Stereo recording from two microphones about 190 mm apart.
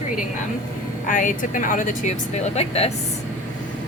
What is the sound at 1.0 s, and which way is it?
Speech, 45° left (ahead or behind).